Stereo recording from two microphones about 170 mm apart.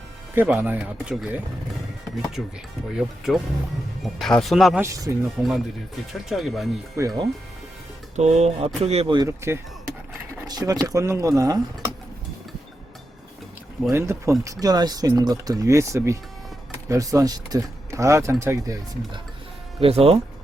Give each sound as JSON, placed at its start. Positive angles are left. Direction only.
{"t": 0.3, "sound": "speech", "side_deg": -10}
{"t": 2.9, "sound": "speech", "side_deg": 0}
{"t": 4.8, "sound": "speech", "side_deg": -20}
{"t": 5.4, "sound": "speech", "side_deg": 0}
{"t": 8.1, "sound": "speech", "side_deg": -40}
{"t": 9.1, "sound": "speech", "side_deg": -15}
{"t": 13.9, "sound": "speech", "side_deg": -15}
{"t": 19.8, "sound": "speech", "side_deg": -35}